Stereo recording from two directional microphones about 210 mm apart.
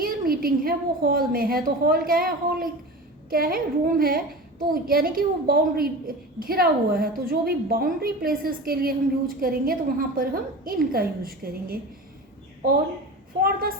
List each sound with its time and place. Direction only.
0.0 s a woman's voice: 45° right (ahead or behind)
13.4 s a woman's voice: 45° right (ahead or behind)